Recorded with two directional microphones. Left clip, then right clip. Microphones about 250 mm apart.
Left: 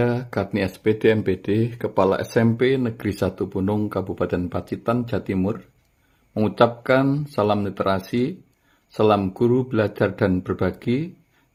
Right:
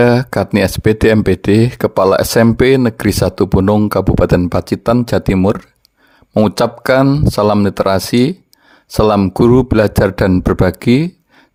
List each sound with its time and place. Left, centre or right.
0.0 s speech: right